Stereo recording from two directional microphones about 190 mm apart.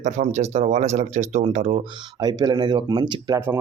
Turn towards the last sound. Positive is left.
turn(degrees=-25)  # may be behind; listen again after turning